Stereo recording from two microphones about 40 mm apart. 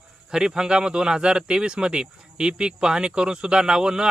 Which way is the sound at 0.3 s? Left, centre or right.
Centre.